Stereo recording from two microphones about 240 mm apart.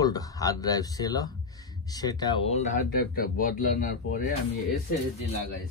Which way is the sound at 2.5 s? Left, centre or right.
Left.